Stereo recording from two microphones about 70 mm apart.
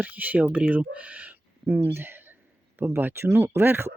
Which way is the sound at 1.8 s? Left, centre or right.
Right.